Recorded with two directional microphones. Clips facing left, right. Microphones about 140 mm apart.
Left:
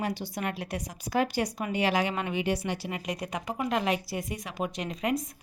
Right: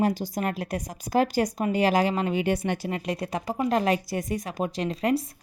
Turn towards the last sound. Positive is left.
turn(degrees=-30)  # may be behind; listen again after turning